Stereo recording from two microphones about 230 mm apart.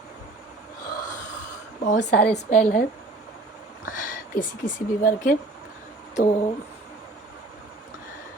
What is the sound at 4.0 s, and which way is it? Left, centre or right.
Speech, left.